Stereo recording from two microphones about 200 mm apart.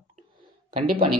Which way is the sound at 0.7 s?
45° right (ahead or behind).